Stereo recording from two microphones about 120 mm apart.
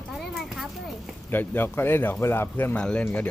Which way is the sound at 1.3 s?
15° left (ahead or behind).